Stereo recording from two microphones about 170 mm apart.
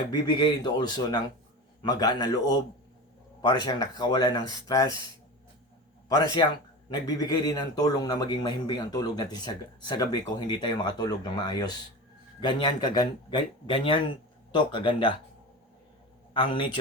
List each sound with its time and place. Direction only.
0.1 s a man's voice: 25° left (ahead or behind)
6.1 s a man's voice: 25° left (ahead or behind)
16.3 s a man's voice: 30° left (ahead or behind)